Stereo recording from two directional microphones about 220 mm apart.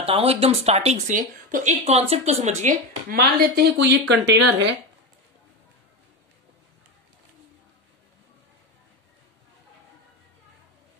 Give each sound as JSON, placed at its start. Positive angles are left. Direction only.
{"t": 0.0, "sound": "speech", "side_deg": -25}